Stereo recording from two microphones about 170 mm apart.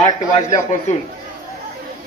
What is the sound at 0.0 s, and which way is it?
Speech, 40° left (ahead or behind).